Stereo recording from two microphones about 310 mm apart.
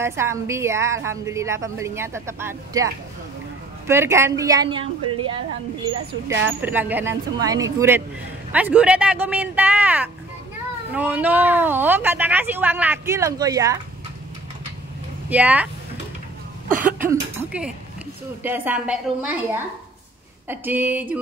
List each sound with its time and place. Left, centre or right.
0.0 s a woman's voice: centre
6.4 s a woman's voice: centre
15.2 s a woman's voice: centre
16.6 s cough: right
17.1 s a woman's voice: centre